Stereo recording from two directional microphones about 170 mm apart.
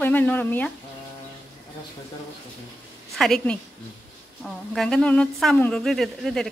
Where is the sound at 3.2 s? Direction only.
5° left (ahead or behind).